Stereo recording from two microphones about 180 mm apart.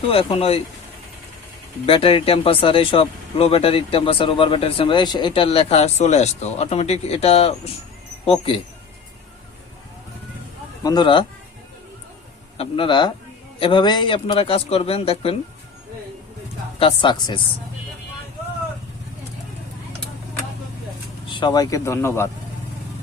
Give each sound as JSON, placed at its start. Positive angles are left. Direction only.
{"t": 0.1, "sound": "speech", "side_deg": 30}
{"t": 1.9, "sound": "speech", "side_deg": 30}
{"t": 10.8, "sound": "speech", "side_deg": 25}
{"t": 12.5, "sound": "speech", "side_deg": 30}
{"t": 16.8, "sound": "speech", "side_deg": 25}
{"t": 21.2, "sound": "speech", "side_deg": 25}